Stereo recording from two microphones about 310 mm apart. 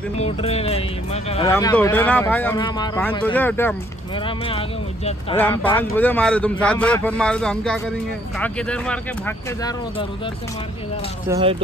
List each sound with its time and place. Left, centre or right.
0.2 s a man's voice: centre
4.5 s speech: centre
5.9 s a man's voice: centre
11.2 s speech: centre